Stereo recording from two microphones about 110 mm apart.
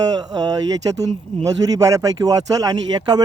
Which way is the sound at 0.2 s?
35° right (ahead or behind).